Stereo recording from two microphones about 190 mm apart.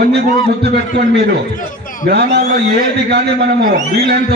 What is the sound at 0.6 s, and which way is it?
A man's voice, 60° right (ahead or behind).